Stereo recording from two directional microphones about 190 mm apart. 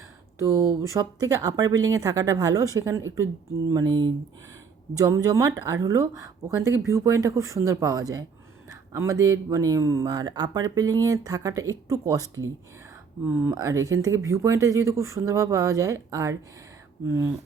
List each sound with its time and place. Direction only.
0.3 s speech: 15° right (ahead or behind)